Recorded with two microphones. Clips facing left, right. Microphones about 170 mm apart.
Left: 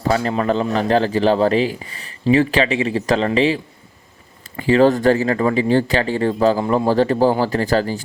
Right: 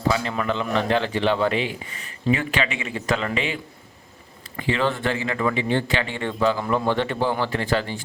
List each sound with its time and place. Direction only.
0.1 s speech: 40° left (ahead or behind)